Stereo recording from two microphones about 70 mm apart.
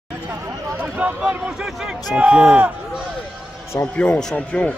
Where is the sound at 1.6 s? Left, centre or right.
Centre.